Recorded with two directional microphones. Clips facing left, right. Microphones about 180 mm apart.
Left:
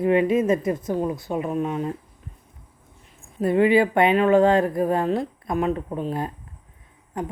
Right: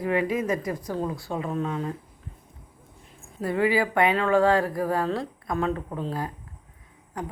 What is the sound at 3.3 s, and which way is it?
Speech, 20° left (ahead or behind).